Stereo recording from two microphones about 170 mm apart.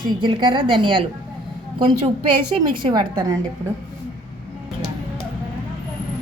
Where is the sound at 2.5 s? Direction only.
25° right (ahead or behind).